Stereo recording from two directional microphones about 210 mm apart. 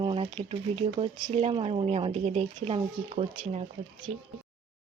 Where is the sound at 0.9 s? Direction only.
25° right (ahead or behind).